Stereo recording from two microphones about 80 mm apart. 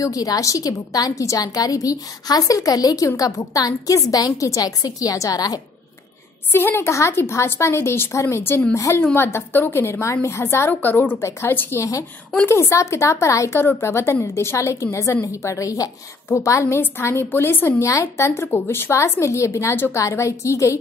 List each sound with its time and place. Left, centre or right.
0.0 s a woman's voice: left
6.5 s a woman's voice: left
11.1 s a woman's voice: left